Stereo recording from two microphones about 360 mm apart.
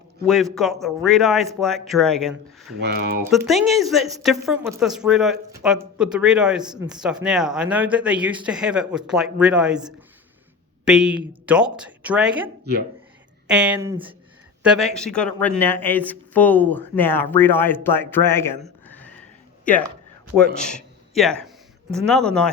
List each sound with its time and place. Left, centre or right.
0.3 s a woman's voice: centre
2.8 s speech: right
3.2 s a woman's voice: centre
13.5 s speech: centre
14.6 s a woman's voice: centre